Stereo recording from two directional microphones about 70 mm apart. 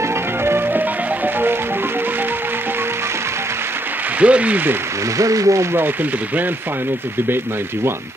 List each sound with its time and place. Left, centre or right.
0.5 s music: right
4.2 s speech: centre
5.1 s speech: right